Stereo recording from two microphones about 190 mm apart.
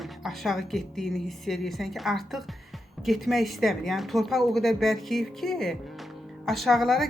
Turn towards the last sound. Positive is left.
turn(degrees=0)  # may be behind; listen again after turning